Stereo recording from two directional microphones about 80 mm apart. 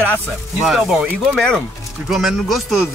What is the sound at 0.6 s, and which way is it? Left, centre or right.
Speech, centre.